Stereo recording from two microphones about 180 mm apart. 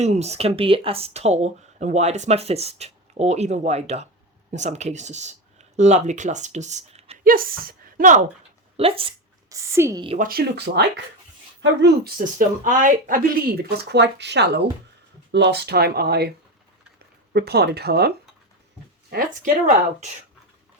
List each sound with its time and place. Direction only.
0.0 s speech: 35° right (ahead or behind)
7.3 s speech: 55° right (ahead or behind)
8.7 s speech: 30° right (ahead or behind)
9.5 s a woman's voice: 15° right (ahead or behind)
10.2 s speech: 55° right (ahead or behind)
17.3 s speech: 65° right (ahead or behind)
19.1 s speech: 50° right (ahead or behind)